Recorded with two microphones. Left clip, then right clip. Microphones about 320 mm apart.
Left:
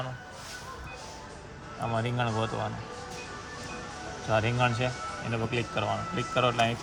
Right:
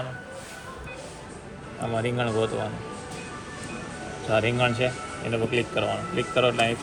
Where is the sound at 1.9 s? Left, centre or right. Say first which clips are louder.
Right 4 dB; centre.